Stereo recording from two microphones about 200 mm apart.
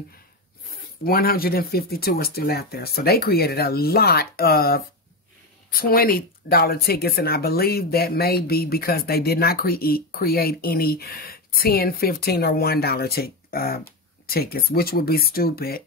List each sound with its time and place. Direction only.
1.0 s speech: 50° left (ahead or behind)